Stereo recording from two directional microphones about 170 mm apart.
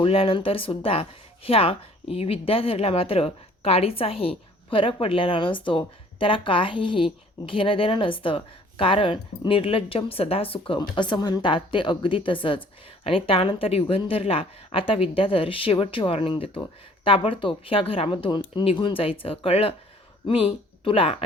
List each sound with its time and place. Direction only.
0.0 s a woman's voice: 35° left (ahead or behind)